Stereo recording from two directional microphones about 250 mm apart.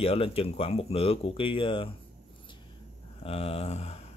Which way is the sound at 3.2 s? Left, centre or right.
Left.